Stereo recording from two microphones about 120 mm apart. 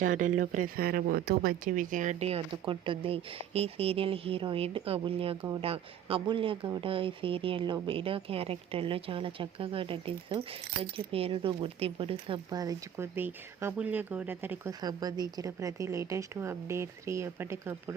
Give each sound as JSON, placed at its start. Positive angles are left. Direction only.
{"t": 0.0, "sound": "speech", "side_deg": -90}
{"t": 1.7, "sound": "speech", "side_deg": -90}
{"t": 12.5, "sound": "speech", "side_deg": -30}
{"t": 13.0, "sound": "speech", "side_deg": -20}
{"t": 14.7, "sound": "speech", "side_deg": -35}